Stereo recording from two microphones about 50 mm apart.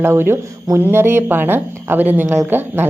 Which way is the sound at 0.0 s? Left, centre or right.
Right.